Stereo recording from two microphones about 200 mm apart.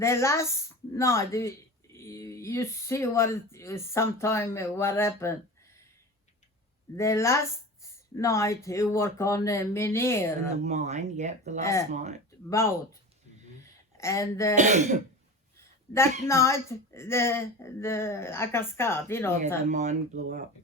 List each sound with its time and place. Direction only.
0.0 s speech: 15° left (ahead or behind)
6.9 s speech: 15° left (ahead or behind)
10.5 s speech: 35° right (ahead or behind)
11.6 s speech: 15° left (ahead or behind)
14.5 s speech: 35° right (ahead or behind)
15.9 s speech: 10° left (ahead or behind)
19.6 s speech: 35° right (ahead or behind)